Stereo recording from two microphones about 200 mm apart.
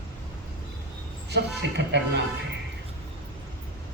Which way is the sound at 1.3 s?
60° right (ahead or behind).